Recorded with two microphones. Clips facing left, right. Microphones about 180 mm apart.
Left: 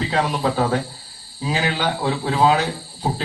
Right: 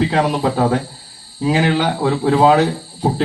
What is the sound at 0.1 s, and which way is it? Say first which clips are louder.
Speech: right 4 dB; 40° right (ahead or behind).